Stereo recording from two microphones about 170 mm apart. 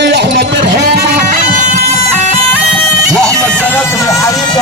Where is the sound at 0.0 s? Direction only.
85° right.